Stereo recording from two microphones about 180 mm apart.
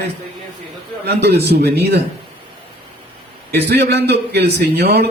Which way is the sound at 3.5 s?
65° right (ahead or behind).